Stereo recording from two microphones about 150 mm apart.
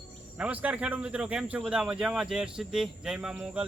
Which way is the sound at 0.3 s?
10° right (ahead or behind).